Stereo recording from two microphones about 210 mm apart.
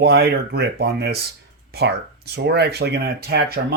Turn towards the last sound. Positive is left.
turn(degrees=-45)  # may be behind; listen again after turning